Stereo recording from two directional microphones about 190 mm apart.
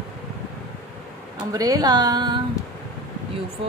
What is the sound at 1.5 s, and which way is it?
Music, 20° right (ahead or behind).